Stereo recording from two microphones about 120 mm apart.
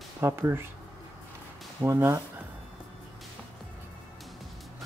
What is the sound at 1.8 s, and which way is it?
Speech, 25° right (ahead or behind).